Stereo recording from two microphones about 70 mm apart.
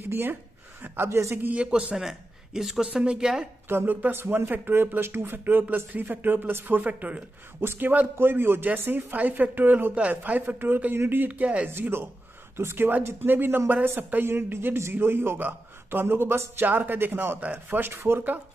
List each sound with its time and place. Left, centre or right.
0.0 s a man's voice: right
1.4 s speech: centre
2.0 s speech: centre
3.6 s speech: right
11.7 s a man's voice: right